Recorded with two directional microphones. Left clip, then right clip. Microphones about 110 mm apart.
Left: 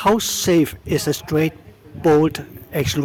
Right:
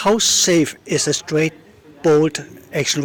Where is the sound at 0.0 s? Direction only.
20° left (ahead or behind).